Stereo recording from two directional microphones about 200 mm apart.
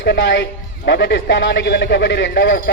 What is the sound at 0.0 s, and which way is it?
A man's voice, 60° left (ahead or behind).